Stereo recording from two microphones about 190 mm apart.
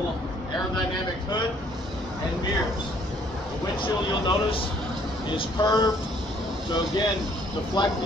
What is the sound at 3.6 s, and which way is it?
Speech, 25° left (ahead or behind).